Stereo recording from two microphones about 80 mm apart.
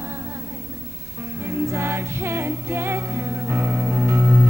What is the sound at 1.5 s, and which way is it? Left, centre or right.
Music, right.